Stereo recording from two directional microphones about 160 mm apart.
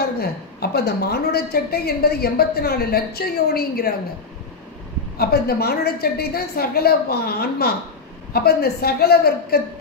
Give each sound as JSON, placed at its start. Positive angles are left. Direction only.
{"t": 0.2, "sound": "a woman's voice", "side_deg": 85}
{"t": 5.1, "sound": "a woman's voice", "side_deg": 75}